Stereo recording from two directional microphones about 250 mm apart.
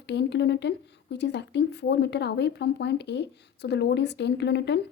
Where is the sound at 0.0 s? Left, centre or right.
Left.